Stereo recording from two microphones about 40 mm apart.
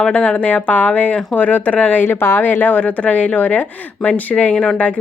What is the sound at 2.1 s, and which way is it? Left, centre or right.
Speech, left.